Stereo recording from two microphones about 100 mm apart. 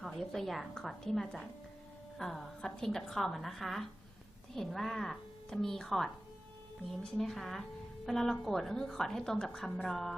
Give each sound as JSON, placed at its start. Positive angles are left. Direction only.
{"t": 0.0, "sound": "a woman's voice", "side_deg": 5}